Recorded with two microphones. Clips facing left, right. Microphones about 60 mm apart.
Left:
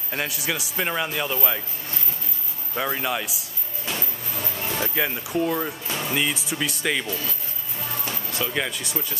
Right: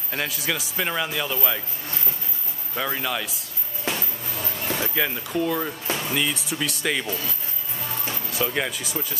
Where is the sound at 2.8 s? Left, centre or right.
Centre.